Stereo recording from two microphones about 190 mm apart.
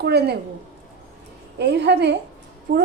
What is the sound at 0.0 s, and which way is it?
Speech, 60° right (ahead or behind).